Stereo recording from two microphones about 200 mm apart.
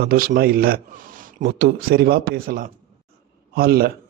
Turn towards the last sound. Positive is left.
turn(degrees=-50)  # may be behind; listen again after turning